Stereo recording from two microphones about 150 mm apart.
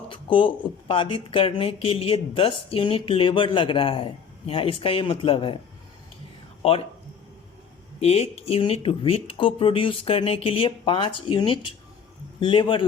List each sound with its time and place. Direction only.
0.1 s speech: 35° left (ahead or behind)
6.6 s speech: 40° left (ahead or behind)
8.0 s speech: 45° left (ahead or behind)